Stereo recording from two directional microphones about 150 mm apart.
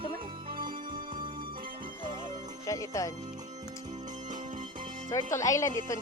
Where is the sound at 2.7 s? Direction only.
20° left (ahead or behind).